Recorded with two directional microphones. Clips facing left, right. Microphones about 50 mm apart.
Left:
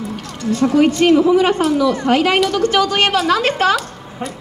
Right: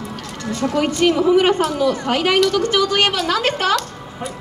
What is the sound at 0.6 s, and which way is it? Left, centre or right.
Speech, left.